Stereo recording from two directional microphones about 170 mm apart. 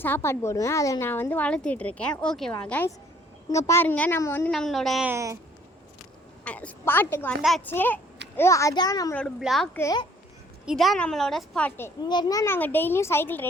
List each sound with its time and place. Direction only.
0.0 s a woman's voice: 15° left (ahead or behind)
4.5 s a woman's voice: centre (ahead or behind)
5.0 s speech: 15° right (ahead or behind)
6.4 s a woman's voice: 10° left (ahead or behind)
7.4 s a woman's voice: centre (ahead or behind)
7.7 s a woman's voice: 10° left (ahead or behind)
9.4 s a woman's voice: centre (ahead or behind)
9.7 s a woman's voice: 15° left (ahead or behind)
10.7 s a woman's voice: centre (ahead or behind)
12.0 s a woman's voice: 25° left (ahead or behind)